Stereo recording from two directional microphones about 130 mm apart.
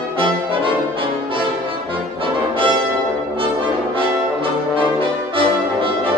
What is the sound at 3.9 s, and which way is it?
Brass instrument, 45° right (ahead or behind).